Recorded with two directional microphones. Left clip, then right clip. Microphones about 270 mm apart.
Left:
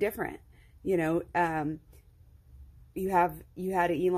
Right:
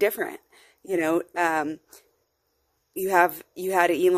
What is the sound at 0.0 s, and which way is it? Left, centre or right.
Speech, right.